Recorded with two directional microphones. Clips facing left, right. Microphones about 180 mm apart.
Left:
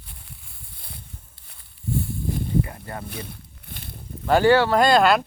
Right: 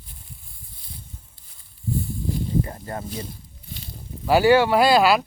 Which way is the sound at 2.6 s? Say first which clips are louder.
Right 3 dB; 25° right (ahead or behind).